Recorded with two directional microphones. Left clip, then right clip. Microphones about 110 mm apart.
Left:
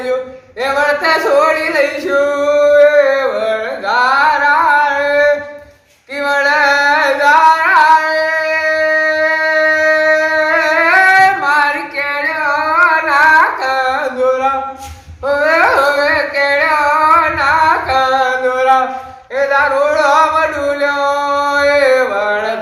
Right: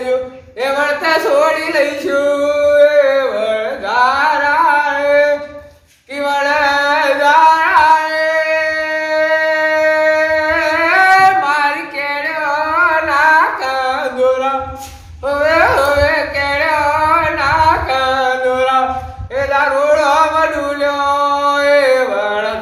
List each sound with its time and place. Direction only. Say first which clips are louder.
0.6 s a sound: left 2 dB; 10° right (ahead or behind)
1.2 s singing: left 1 dB; 15° right (ahead or behind)
5.1 s a sound: even; 15° right (ahead or behind)
6.3 s carnatic music: left 2 dB; 10° right (ahead or behind)
19.4 s male singing: left 2 dB; 20° right (ahead or behind)
21.3 s mantra: left 1 dB; 15° right (ahead or behind)